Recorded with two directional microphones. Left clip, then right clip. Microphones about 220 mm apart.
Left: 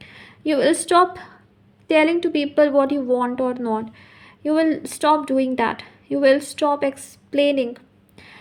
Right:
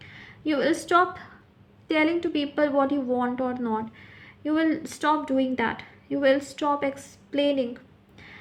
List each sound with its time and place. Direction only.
0.0 s a woman's voice: 30° left (ahead or behind)